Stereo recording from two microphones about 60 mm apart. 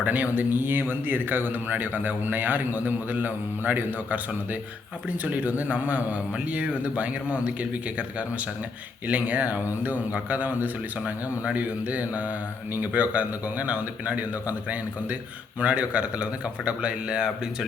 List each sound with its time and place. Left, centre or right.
0.0 s speech: right; by 17.7 s centre